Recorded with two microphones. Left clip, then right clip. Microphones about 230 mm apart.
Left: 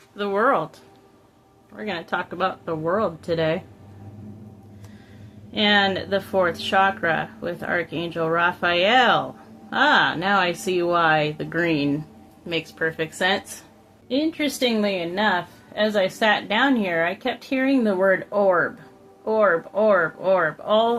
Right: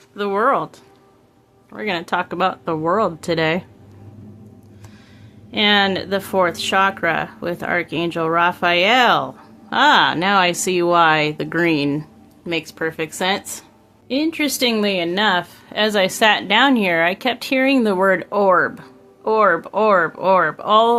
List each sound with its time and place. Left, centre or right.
0.2 s speech: right
1.7 s a woman's voice: right
5.5 s a woman's voice: right